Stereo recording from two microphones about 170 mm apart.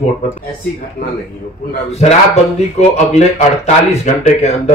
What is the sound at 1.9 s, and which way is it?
A man's voice, 40° left (ahead or behind).